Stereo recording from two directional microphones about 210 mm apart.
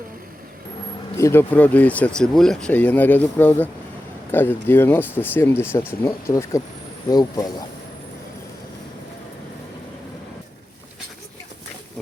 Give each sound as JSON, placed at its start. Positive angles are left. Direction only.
{"t": 1.1, "sound": "speech", "side_deg": 10}